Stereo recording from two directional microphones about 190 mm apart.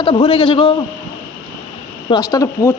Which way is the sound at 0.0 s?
25° left (ahead or behind).